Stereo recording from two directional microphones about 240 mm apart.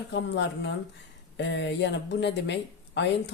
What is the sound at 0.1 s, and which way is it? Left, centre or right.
Speech, left.